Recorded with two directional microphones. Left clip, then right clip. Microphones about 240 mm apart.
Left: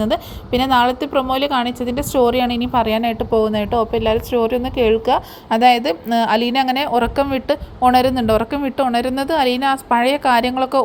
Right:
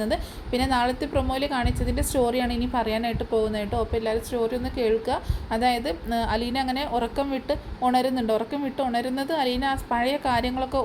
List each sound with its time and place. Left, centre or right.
0.0 s a woman's voice: left